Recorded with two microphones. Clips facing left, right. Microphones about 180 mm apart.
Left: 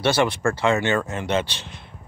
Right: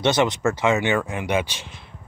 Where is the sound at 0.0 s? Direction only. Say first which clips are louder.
Right 1 dB; 20° right (ahead or behind).